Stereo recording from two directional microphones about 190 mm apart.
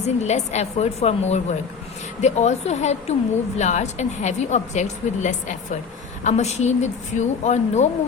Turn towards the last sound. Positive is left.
turn(degrees=35)  # may be behind; listen again after turning